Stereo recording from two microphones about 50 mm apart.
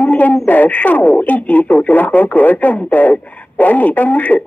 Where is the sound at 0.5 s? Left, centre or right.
Left.